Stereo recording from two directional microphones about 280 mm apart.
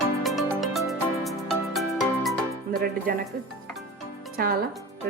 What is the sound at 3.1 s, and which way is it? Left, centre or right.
Speech, right.